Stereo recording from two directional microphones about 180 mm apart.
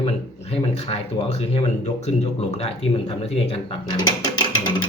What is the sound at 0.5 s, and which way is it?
Speech, 35° left (ahead or behind).